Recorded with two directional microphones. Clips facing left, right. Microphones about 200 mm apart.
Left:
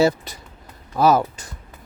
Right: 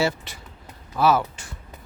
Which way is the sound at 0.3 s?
40° left (ahead or behind).